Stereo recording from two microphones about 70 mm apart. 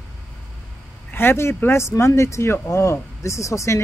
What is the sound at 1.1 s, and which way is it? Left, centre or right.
Speech, left.